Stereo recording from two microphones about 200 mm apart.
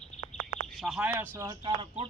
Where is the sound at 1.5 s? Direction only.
25° right (ahead or behind).